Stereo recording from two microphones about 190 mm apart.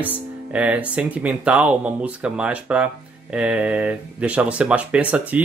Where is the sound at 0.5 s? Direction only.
5° right (ahead or behind).